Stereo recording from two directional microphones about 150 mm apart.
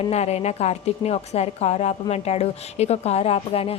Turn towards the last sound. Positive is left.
turn(degrees=40)  # may be behind; listen again after turning